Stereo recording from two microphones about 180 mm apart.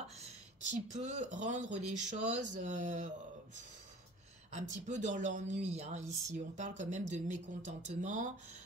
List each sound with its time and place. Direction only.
0.7 s speech: 45° right (ahead or behind)
4.5 s speech: 40° right (ahead or behind)